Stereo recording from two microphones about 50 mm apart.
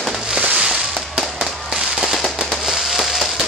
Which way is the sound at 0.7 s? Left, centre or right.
Centre.